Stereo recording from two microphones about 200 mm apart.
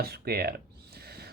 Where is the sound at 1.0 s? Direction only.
50° right (ahead or behind).